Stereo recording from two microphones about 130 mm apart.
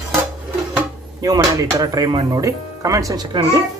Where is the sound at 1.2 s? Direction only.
30° right (ahead or behind).